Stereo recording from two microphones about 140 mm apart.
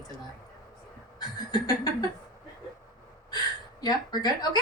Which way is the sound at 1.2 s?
30° left (ahead or behind).